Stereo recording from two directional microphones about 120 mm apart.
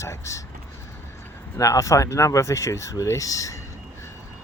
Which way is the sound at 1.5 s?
25° left (ahead or behind).